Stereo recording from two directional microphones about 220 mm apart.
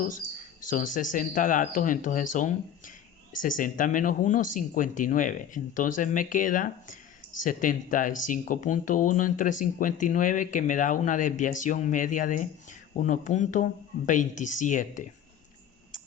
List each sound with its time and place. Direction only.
0.6 s speech: 35° left (ahead or behind)
15.9 s tick-tock: 35° left (ahead or behind)